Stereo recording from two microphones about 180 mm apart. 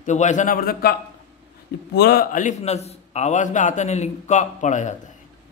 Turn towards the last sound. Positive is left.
turn(degrees=40)  # may be behind; listen again after turning